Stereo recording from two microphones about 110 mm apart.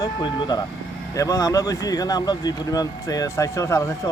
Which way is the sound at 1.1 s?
30° left (ahead or behind).